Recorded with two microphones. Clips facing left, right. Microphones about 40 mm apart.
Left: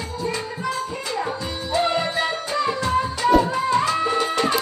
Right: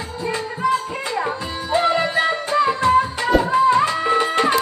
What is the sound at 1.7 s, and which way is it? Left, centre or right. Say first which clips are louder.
Music: right 3 dB; right.